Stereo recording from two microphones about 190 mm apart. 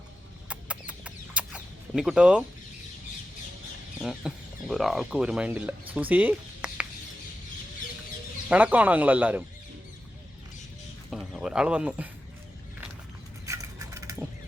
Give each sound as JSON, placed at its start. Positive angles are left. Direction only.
{"t": 0.4, "sound": "chicken", "side_deg": -5}
{"t": 4.0, "sound": "speech", "side_deg": -5}
{"t": 5.9, "sound": "a sound", "side_deg": -10}
{"t": 8.4, "sound": "speech", "side_deg": -5}
{"t": 11.1, "sound": "speech", "side_deg": 0}
{"t": 13.4, "sound": "a sound", "side_deg": -15}